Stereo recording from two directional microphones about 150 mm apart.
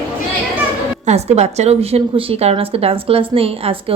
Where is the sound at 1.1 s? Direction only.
45° right (ahead or behind).